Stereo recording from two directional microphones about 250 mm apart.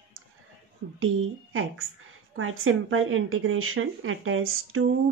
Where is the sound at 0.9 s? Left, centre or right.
Right.